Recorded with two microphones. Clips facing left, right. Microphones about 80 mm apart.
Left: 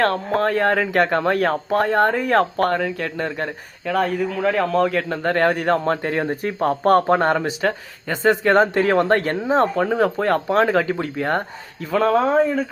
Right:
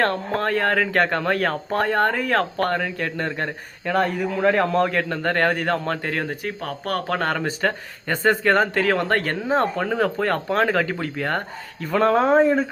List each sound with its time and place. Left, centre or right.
0.0 s speech: centre
5.1 s speech: centre
6.4 s speech: left
7.1 s speech: left
7.6 s speech: centre
8.5 s speech: left
11.9 s speech: centre